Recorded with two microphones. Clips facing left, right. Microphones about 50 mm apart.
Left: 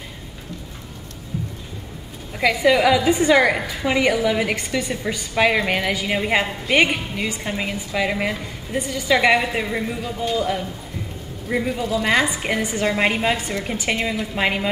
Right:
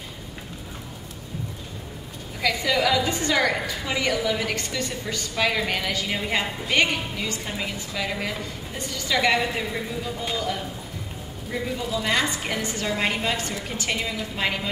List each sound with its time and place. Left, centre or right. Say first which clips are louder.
2.4 s a woman's voice: left 7 dB; centre
11.5 s a woman's voice: left 6 dB; left
11.8 s a woman's voice: left 5 dB; centre
12.1 s a woman's voice: left 4 dB; centre